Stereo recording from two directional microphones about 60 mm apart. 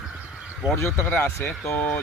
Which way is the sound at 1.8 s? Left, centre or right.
Left.